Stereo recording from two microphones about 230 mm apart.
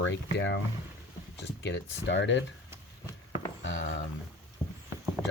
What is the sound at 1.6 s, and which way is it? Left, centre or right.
Speech, left.